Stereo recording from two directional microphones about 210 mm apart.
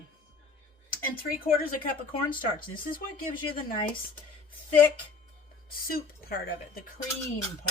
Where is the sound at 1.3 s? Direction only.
40° left (ahead or behind).